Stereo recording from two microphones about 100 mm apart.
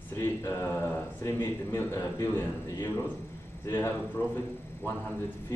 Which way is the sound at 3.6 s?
25° left (ahead or behind).